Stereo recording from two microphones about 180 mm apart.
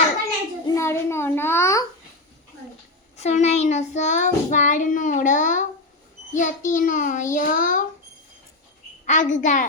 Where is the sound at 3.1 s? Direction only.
40° left (ahead or behind).